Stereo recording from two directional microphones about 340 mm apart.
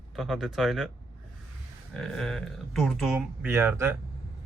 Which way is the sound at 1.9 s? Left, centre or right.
Centre.